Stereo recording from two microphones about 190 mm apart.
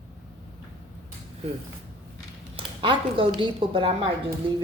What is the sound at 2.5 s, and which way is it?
Speech, 25° right (ahead or behind).